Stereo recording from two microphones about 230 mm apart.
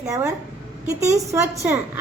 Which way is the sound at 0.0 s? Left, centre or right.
Centre.